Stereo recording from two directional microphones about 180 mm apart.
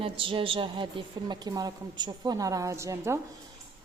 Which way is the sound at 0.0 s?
30° right (ahead or behind).